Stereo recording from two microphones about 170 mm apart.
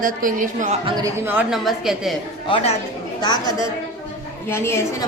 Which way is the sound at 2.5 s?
40° left (ahead or behind).